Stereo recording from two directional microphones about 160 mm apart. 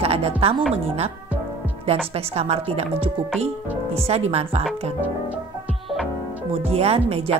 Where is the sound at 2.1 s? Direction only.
40° right (ahead or behind).